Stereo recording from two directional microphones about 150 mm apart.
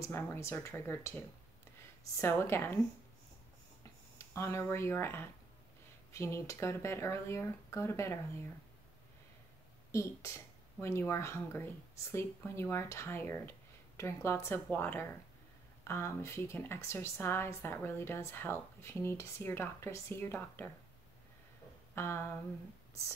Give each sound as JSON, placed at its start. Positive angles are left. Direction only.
{"t": 0.1, "sound": "speech", "side_deg": 15}
{"t": 4.2, "sound": "speech", "side_deg": 20}
{"t": 9.8, "sound": "speech", "side_deg": 20}
{"t": 21.9, "sound": "a sound", "side_deg": 15}